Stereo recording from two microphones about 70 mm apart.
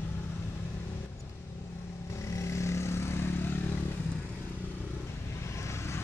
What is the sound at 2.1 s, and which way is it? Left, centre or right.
Vehicle, left.